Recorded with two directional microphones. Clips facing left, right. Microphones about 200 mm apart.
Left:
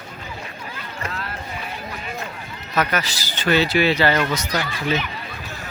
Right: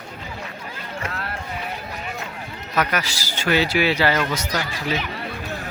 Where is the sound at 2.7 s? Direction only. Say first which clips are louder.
Left 1 dB; 10° right (ahead or behind).